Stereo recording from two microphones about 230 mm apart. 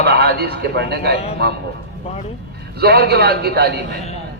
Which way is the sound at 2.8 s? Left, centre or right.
Right.